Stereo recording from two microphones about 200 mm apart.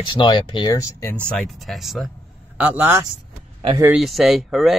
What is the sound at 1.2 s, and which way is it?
A man's voice, centre (ahead or behind).